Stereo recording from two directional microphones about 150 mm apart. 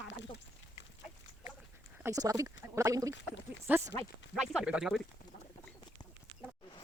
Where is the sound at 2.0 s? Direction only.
25° right (ahead or behind); by 5.0 s 5° right (ahead or behind).